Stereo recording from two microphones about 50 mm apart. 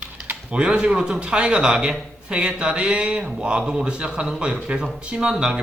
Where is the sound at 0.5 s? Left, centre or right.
Centre.